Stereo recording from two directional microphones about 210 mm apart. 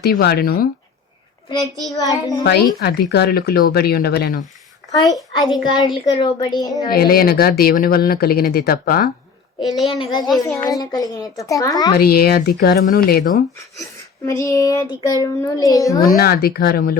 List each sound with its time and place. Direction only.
0.0 s speech: 50° left (ahead or behind)
2.0 s a child's voice: 15° left (ahead or behind)
2.4 s speech: 50° left (ahead or behind)
4.9 s a child's voice: 15° left (ahead or behind)
6.9 s speech: 45° left (ahead or behind)
9.6 s a child's voice: centre (ahead or behind)
9.9 s a child's voice: 20° left (ahead or behind)
11.9 s speech: 45° left (ahead or behind)
14.3 s a child's voice: 15° left (ahead or behind)
16.0 s speech: 45° left (ahead or behind)